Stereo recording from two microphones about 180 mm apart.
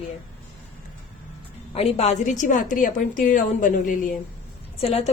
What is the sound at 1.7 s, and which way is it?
A woman's voice, 35° left (ahead or behind).